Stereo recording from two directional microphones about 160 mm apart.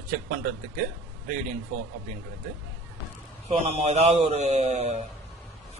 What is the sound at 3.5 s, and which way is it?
A man's voice, 40° right (ahead or behind).